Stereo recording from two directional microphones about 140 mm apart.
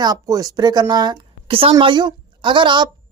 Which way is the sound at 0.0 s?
25° right (ahead or behind).